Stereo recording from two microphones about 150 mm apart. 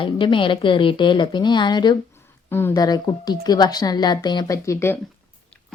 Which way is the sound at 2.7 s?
25° left (ahead or behind).